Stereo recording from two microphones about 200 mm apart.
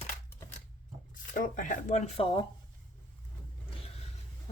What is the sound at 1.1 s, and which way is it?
Speech, 40° left (ahead or behind).